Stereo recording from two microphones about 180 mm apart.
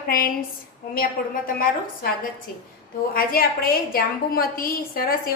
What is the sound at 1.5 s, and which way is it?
A woman's voice, 50° left (ahead or behind).